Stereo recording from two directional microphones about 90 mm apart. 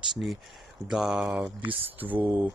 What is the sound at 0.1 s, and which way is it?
Speech, centre (ahead or behind).